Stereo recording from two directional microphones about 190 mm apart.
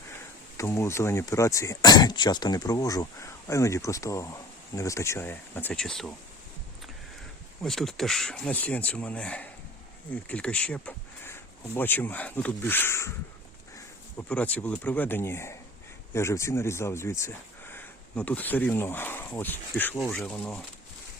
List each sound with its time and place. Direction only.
0.5 s speech: 15° left (ahead or behind)
7.6 s speech: centre (ahead or behind)